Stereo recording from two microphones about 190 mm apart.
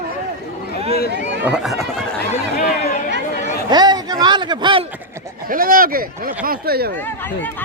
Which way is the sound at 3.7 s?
20° right (ahead or behind).